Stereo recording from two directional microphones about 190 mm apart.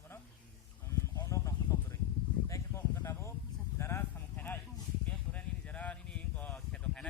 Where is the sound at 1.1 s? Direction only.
15° left (ahead or behind).